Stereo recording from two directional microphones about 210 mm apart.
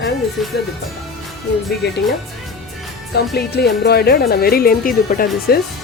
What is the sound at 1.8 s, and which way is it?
Speech, 50° left (ahead or behind).